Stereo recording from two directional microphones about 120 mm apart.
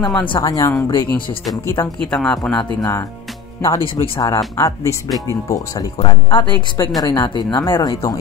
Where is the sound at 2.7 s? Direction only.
30° left (ahead or behind).